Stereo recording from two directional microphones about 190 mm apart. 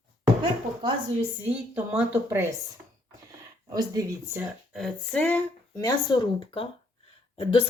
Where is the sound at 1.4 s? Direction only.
5° right (ahead or behind).